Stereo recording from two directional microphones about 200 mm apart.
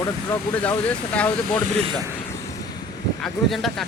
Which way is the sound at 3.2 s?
Centre (ahead or behind).